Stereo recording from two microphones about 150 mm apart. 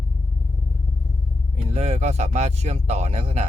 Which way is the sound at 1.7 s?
45° right (ahead or behind).